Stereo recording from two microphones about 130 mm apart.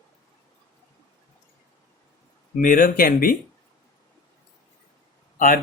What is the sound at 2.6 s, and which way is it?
Speech, 90° left.